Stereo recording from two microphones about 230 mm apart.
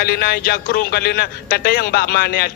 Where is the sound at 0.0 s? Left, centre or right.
Left.